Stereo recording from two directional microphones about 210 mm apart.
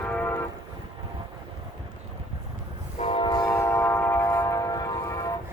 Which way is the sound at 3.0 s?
25° left (ahead or behind).